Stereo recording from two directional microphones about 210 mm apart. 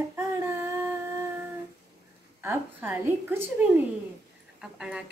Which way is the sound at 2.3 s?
10° right (ahead or behind).